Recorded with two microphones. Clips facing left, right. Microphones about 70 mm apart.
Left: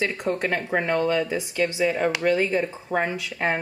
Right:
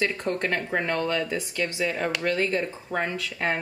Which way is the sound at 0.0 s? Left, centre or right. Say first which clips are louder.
Left 1 dB; centre.